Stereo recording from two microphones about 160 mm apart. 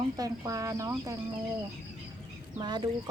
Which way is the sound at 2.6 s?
25° right (ahead or behind).